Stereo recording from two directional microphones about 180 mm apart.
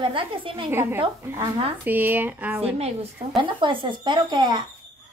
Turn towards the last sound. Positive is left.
turn(degrees=-25)  # may be behind; listen again after turning